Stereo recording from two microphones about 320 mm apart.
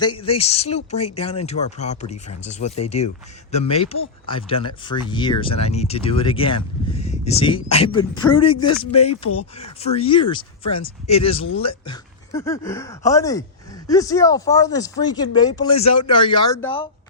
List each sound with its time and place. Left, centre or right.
0.0 s speech: centre